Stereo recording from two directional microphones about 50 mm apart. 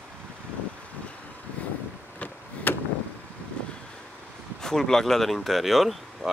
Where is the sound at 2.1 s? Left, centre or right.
Left.